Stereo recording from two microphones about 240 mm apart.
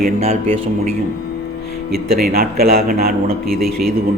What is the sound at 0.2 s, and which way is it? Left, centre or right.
Speech, right.